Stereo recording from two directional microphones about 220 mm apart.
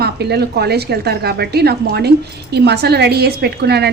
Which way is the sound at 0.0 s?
50° right (ahead or behind).